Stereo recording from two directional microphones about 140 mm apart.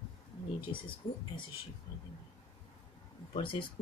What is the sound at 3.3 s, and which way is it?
Speech, 35° left (ahead or behind).